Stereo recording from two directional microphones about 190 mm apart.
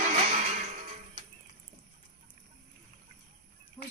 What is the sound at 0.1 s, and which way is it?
Music, 40° right (ahead or behind).